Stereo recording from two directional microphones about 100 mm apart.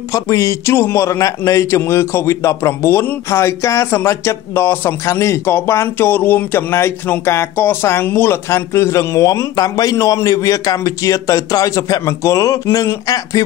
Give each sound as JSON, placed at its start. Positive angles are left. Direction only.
{"t": 0.1, "sound": "a man's voice", "side_deg": 35}